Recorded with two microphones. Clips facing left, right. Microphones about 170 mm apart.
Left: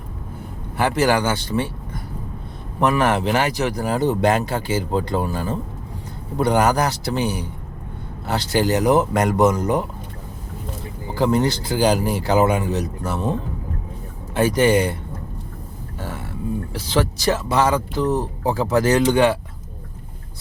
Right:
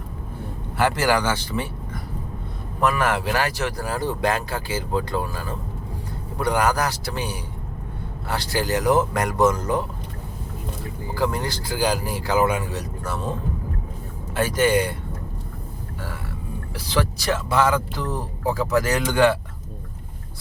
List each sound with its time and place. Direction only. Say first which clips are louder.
0.8 s speech: left 2 dB; 20° left (ahead or behind)
2.9 s speech: left 4 dB; 20° left (ahead or behind)
11.1 s speech: left 6 dB; 20° left (ahead or behind)
14.3 s speech: left 3 dB; 20° left (ahead or behind)
16.7 s speech: left 1 dB; 25° left (ahead or behind)